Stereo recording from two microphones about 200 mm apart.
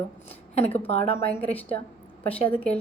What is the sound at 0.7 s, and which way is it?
Speech, 30° left (ahead or behind).